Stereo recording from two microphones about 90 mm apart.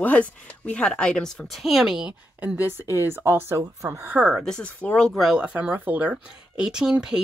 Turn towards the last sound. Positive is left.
turn(degrees=-10)  # may be behind; listen again after turning